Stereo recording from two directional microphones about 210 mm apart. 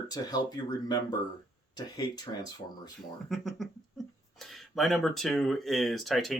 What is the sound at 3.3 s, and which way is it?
Speech, centre (ahead or behind).